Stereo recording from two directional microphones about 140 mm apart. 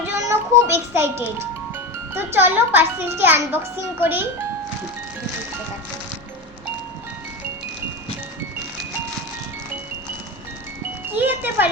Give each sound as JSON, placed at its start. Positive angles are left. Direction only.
{"t": 0.1, "sound": "music", "side_deg": -15}
{"t": 2.1, "sound": "a child's voice", "side_deg": -15}
{"t": 11.1, "sound": "a child's voice", "side_deg": -15}